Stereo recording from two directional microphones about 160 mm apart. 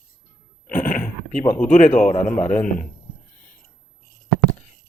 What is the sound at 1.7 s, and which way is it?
Speech, 50° left (ahead or behind).